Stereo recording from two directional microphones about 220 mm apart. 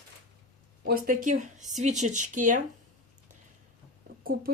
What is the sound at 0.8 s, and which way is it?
Speech, 40° right (ahead or behind).